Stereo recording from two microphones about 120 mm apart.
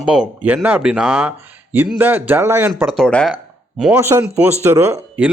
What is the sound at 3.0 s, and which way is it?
Speech, 5° left (ahead or behind).